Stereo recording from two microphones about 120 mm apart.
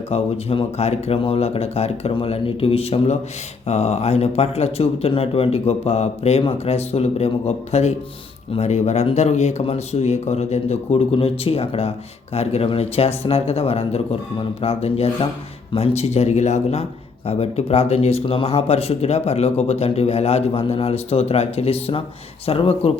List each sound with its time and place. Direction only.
0.1 s speech: 55° left (ahead or behind)